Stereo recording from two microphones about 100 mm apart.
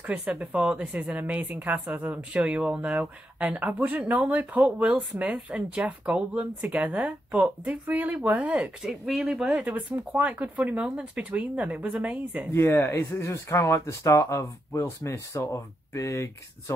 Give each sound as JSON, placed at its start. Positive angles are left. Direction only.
{"t": 0.0, "sound": "a woman's voice", "side_deg": -15}
{"t": 8.8, "sound": "a woman's voice", "side_deg": -5}
{"t": 12.5, "sound": "speech", "side_deg": 25}